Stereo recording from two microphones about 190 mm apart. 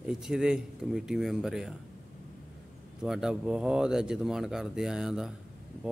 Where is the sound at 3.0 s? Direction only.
Centre (ahead or behind).